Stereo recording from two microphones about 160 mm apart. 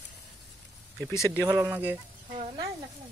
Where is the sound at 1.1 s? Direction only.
20° left (ahead or behind).